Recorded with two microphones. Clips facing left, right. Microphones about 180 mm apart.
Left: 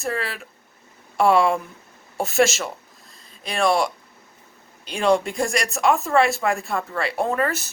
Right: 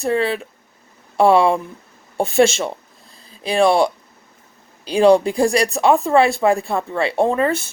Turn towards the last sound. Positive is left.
turn(degrees=-25)  # may be behind; listen again after turning